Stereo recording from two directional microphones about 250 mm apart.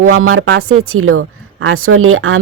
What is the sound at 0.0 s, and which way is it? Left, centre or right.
Speech, right.